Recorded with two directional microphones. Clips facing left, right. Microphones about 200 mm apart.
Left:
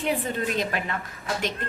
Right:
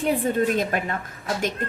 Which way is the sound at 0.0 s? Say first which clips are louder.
Right 5 dB; 45° right (ahead or behind).